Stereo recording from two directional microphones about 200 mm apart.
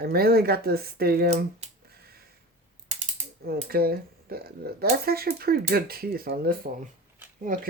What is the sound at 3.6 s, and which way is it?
Speech, 50° right (ahead or behind).